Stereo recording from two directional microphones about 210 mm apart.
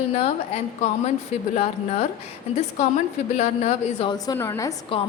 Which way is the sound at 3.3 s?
30° left (ahead or behind).